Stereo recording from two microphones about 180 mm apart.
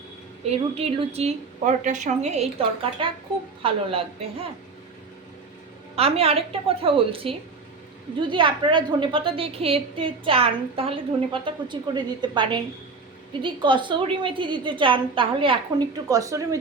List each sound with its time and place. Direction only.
0.4 s a woman's voice: 35° right (ahead or behind)
6.0 s a woman's voice: 35° right (ahead or behind)
16.0 s a woman's voice: 20° right (ahead or behind)